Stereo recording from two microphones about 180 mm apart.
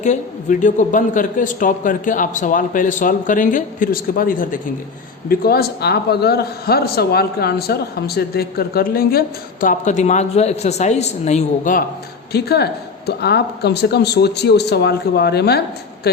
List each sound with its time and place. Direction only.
0.6 s a man's voice: 45° left (ahead or behind)
12.3 s a man's voice: 60° left (ahead or behind)